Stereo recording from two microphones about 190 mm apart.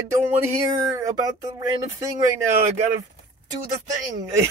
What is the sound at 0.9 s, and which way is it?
Speech, 15° right (ahead or behind).